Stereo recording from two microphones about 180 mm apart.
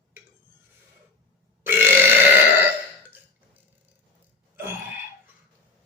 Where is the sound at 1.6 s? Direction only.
10° right (ahead or behind).